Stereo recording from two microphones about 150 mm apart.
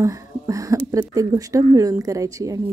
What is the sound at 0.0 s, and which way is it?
Speech, 20° right (ahead or behind).